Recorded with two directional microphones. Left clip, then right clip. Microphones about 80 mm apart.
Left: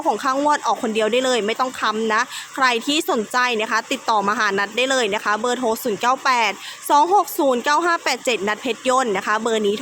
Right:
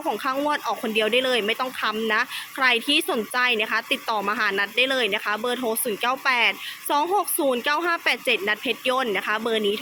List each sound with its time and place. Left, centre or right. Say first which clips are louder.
0.0 s a woman's voice: left 6 dB; left